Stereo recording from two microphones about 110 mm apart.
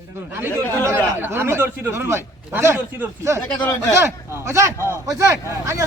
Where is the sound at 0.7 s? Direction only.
25° right (ahead or behind).